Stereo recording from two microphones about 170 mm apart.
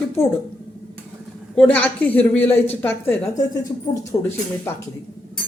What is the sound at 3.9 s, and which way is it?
Speech, 25° left (ahead or behind).